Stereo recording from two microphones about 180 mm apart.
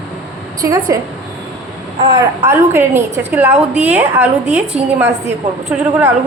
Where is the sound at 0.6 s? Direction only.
20° right (ahead or behind).